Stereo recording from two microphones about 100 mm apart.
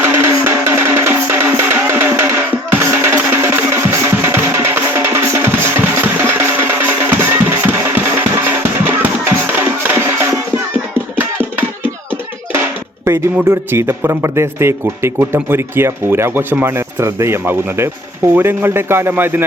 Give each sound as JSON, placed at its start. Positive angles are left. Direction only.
{"t": 0.0, "sound": "music", "side_deg": -25}
{"t": 13.1, "sound": "a sound", "side_deg": -25}
{"t": 13.4, "sound": "speech", "side_deg": -25}